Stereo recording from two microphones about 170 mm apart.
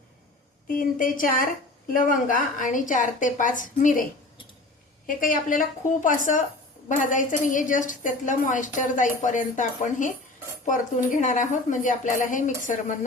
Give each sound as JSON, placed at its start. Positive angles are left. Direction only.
{"t": 0.7, "sound": "a woman's voice", "side_deg": 55}
{"t": 5.0, "sound": "a woman's voice", "side_deg": 50}